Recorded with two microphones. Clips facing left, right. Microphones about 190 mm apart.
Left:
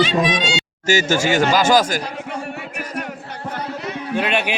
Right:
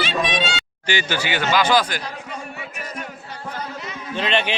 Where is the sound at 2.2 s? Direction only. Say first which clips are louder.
Left 5 dB; 65° left (ahead or behind).